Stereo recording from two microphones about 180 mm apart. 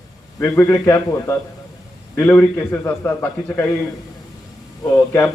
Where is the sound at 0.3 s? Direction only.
10° left (ahead or behind).